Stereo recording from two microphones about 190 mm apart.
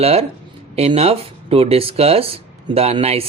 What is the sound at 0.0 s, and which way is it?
Speech, 30° right (ahead or behind).